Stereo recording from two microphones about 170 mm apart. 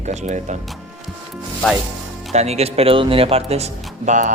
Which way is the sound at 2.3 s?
40° right (ahead or behind).